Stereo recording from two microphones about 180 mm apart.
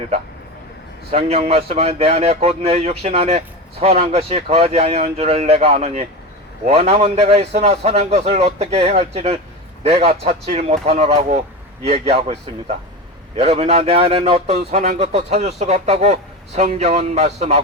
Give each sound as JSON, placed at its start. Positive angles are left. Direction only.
{"t": 1.1, "sound": "a man's voice", "side_deg": -35}